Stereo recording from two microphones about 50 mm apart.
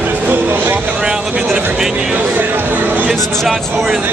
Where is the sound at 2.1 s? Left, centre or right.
Right.